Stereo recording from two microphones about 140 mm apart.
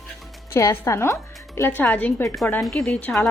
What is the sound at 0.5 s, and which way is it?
Speech, 20° left (ahead or behind).